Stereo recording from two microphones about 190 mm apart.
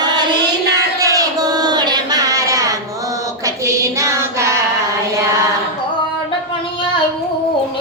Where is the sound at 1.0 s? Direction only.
20° right (ahead or behind).